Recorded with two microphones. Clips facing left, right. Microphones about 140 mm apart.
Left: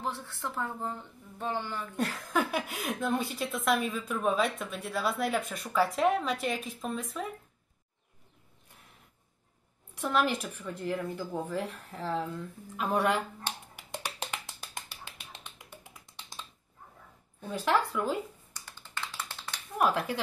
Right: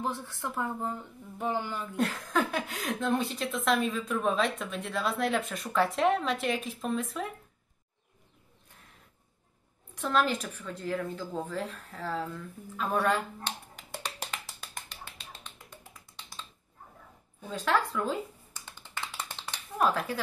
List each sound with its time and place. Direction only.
0.0 s speech: 15° right (ahead or behind)
2.3 s a woman's voice: 10° left (ahead or behind)
9.9 s speech: 15° left (ahead or behind)
14.2 s finger snapping: 15° left (ahead or behind)
17.5 s speech: 15° left (ahead or behind)
18.7 s a sound: 15° right (ahead or behind)
19.8 s speech: 10° left (ahead or behind)